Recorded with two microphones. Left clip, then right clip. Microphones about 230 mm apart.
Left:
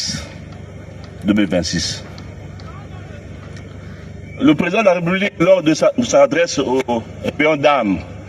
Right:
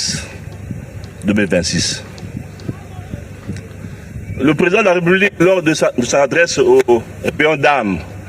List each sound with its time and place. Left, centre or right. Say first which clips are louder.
0.0 s train: right 3 dB; right
1.3 s a man's voice: right 2 dB; right
4.4 s a man's voice: right 2 dB; right